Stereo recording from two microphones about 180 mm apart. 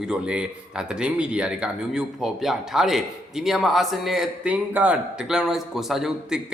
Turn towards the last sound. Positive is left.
turn(degrees=-5)  # may be behind; listen again after turning